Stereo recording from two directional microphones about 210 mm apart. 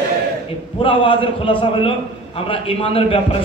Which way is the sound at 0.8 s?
25° left (ahead or behind).